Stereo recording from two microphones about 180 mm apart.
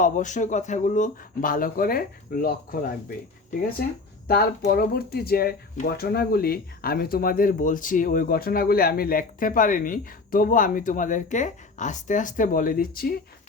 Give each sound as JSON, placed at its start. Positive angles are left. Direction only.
{"t": 0.0, "sound": "speech", "side_deg": 45}
{"t": 4.6, "sound": "speech", "side_deg": 55}